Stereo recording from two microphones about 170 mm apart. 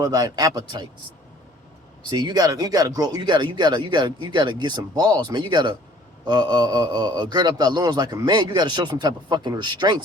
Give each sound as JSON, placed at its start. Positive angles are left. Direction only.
{"t": 0.0, "sound": "a man's voice", "side_deg": -20}
{"t": 2.0, "sound": "a man's voice", "side_deg": -25}